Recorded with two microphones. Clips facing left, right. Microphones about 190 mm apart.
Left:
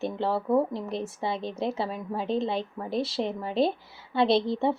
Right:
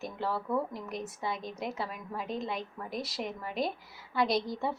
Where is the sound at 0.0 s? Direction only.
30° left (ahead or behind).